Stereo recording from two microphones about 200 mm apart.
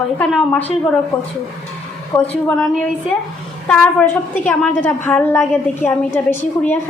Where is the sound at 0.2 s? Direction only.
5° left (ahead or behind).